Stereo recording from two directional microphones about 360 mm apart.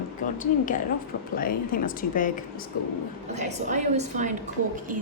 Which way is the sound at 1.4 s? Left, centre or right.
Left.